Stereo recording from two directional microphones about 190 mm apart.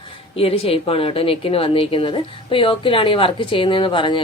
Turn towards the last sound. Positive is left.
turn(degrees=25)  # may be behind; listen again after turning